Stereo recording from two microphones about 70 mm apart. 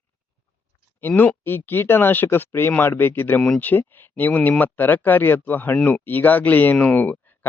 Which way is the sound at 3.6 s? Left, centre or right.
Left.